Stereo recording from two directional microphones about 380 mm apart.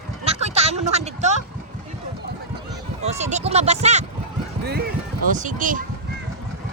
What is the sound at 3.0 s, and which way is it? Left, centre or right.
Speech, centre.